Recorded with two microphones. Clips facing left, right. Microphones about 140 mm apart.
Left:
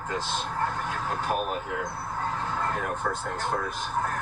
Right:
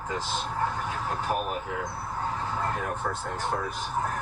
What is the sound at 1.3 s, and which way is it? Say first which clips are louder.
Speech: left 1 dB; 5° left (ahead or behind).